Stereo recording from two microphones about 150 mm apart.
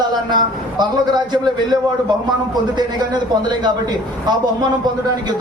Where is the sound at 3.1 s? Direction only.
30° right (ahead or behind).